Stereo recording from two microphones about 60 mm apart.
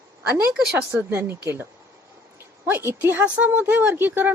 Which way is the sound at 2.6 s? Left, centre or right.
Right.